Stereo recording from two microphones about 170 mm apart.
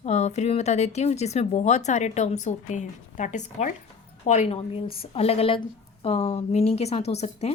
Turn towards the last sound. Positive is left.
turn(degrees=40)  # may be behind; listen again after turning